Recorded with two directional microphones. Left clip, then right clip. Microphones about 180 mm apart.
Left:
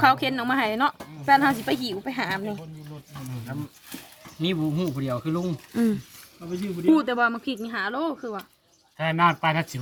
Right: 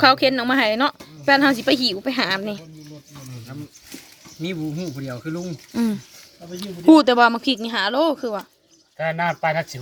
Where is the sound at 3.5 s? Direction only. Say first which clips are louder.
Left 2 dB; 25° left (ahead or behind).